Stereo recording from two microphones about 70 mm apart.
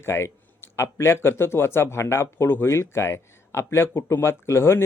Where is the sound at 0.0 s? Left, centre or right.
Left.